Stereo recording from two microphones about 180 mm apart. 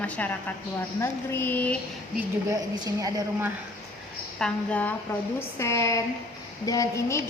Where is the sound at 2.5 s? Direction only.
20° right (ahead or behind).